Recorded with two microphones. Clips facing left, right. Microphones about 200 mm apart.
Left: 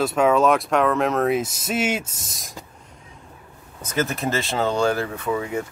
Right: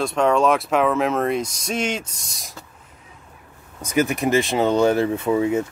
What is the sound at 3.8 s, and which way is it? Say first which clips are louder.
Speech: right 4 dB; 10° right (ahead or behind).